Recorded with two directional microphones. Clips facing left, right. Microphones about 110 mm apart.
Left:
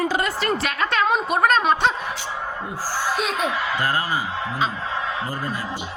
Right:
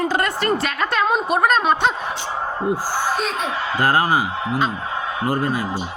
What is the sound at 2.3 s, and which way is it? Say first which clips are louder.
Speech: right 4 dB; 35° right (ahead or behind).